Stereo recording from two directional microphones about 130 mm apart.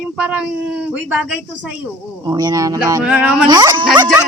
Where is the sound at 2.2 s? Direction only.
30° right (ahead or behind).